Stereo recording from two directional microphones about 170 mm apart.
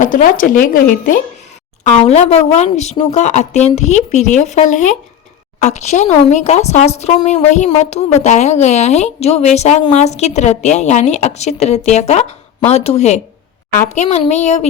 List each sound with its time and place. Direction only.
0.0 s speech: 50° left (ahead or behind)
1.8 s speech: 40° left (ahead or behind)